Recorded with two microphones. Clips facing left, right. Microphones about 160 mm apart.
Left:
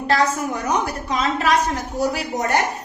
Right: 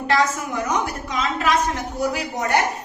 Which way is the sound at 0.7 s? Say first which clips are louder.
Left 4 dB; 35° left (ahead or behind).